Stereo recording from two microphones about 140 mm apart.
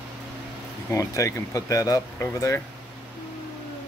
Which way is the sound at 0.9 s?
20° left (ahead or behind).